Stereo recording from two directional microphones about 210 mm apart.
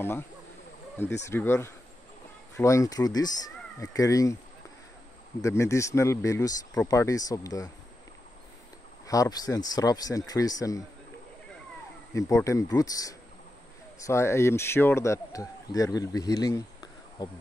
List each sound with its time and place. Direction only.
1.2 s speech: 10° left (ahead or behind)
5.4 s speech: 15° left (ahead or behind)
9.0 s speech: 15° left (ahead or behind)
12.1 s speech: 15° left (ahead or behind)